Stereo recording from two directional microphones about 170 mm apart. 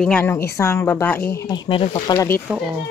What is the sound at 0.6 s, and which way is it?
Speech, 15° left (ahead or behind).